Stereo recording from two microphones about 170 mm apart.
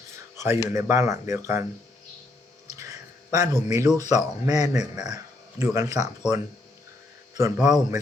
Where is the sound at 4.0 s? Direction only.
20° right (ahead or behind).